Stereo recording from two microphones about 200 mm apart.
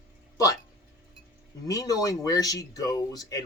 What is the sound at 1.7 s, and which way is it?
Speech, 15° left (ahead or behind).